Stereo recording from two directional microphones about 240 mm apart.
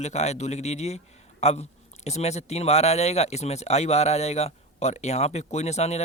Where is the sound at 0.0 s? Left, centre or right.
Left.